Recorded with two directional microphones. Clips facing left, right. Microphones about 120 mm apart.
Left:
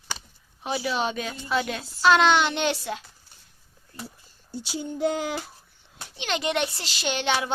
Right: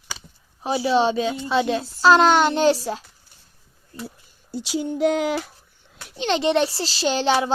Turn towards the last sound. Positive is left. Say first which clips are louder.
# right 6 dB
turn(degrees=-35)  # may be behind; listen again after turning